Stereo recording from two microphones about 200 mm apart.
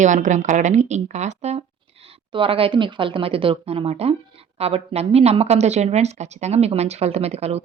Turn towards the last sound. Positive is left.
turn(degrees=-30)  # may be behind; listen again after turning